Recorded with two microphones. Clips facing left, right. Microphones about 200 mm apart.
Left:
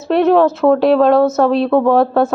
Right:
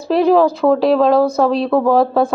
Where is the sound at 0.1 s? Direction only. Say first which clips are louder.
Left 1 dB; centre (ahead or behind).